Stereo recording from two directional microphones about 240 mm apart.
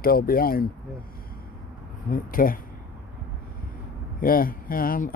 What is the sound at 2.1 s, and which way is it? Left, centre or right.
Speech, left.